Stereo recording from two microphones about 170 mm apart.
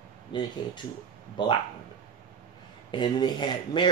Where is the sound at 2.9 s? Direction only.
25° left (ahead or behind).